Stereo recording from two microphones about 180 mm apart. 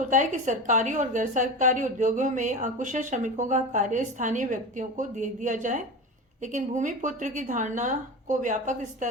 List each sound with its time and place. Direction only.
0.1 s a woman's voice: 45° right (ahead or behind)